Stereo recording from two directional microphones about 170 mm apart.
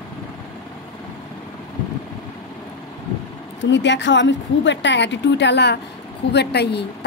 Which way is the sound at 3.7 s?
90° left.